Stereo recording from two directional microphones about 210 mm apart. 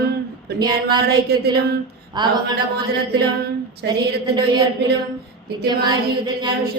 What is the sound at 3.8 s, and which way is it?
Speech, 55° right (ahead or behind).